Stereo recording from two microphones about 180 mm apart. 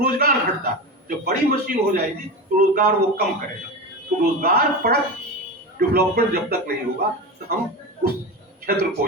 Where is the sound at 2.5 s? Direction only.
50° right (ahead or behind).